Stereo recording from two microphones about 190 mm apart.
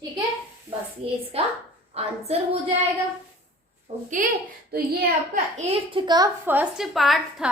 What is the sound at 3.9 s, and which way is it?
Speech, 35° right (ahead or behind).